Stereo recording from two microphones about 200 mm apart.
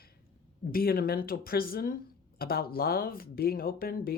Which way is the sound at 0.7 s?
50° left (ahead or behind).